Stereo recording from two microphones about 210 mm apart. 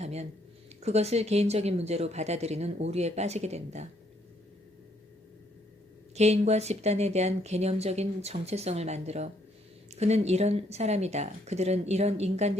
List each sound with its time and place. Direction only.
0.0 s a sound: 30° right (ahead or behind)
0.8 s speech: 30° right (ahead or behind)
6.1 s speech: 30° right (ahead or behind)